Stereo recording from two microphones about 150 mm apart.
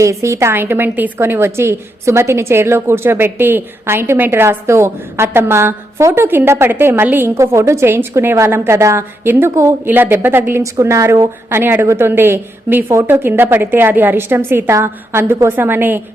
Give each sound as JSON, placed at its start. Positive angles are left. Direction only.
{"t": 0.0, "sound": "a woman's voice", "side_deg": -20}